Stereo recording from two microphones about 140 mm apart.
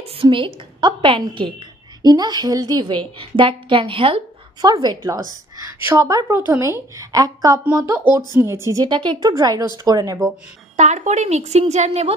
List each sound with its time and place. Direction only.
0.0 s a woman's voice: 40° right (ahead or behind)
4.6 s a woman's voice: 30° right (ahead or behind)
8.8 s a woman's voice: 35° right (ahead or behind)
10.8 s a woman's voice: 55° right (ahead or behind)